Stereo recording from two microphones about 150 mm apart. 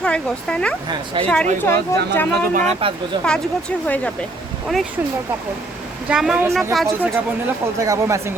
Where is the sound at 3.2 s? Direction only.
5° left (ahead or behind).